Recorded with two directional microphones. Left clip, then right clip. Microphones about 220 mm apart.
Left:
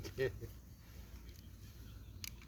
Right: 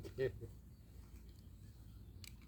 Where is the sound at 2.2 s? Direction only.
15° right (ahead or behind).